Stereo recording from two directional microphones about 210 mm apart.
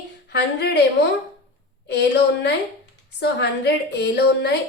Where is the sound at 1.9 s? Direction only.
55° left (ahead or behind).